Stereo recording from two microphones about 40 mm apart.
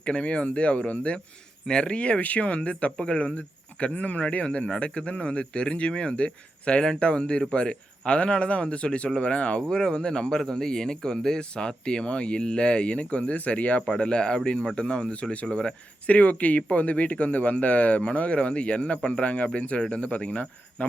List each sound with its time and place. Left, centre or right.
0.0 s speech: left
9.6 s speech: centre; by 13.8 s left
13.8 s speech: left
15.4 s speech: centre
16.0 s speech: left